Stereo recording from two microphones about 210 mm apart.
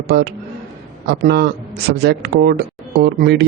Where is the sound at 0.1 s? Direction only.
50° right (ahead or behind).